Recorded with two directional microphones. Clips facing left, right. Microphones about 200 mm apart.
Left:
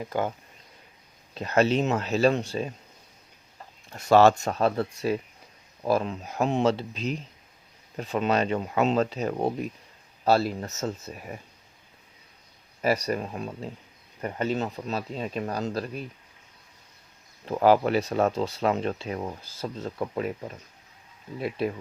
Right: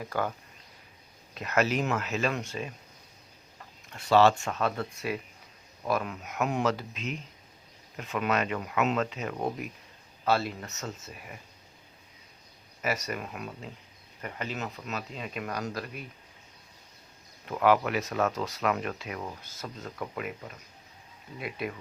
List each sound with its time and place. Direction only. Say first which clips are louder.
0.0 s speech: left 3 dB; 20° left (ahead or behind)
1.3 s speech: left 5 dB; 30° left (ahead or behind)
3.9 s speech: left 4 dB; 45° left (ahead or behind)
12.8 s speech: left 7 dB; 35° left (ahead or behind)
17.4 s speech: left 4 dB; 35° left (ahead or behind)
21.3 s speech: left 7 dB; 30° left (ahead or behind)